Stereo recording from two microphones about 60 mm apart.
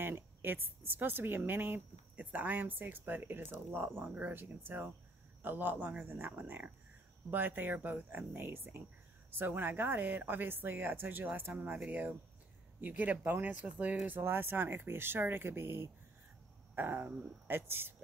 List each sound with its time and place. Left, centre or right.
0.0 s a woman's voice: right
14.1 s speech: right